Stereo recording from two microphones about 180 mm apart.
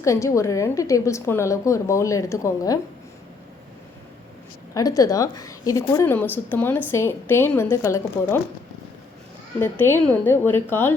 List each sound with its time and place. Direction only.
0.0 s a woman's voice: 15° left (ahead or behind)
4.7 s a woman's voice: 20° left (ahead or behind)
9.6 s a woman's voice: 10° left (ahead or behind)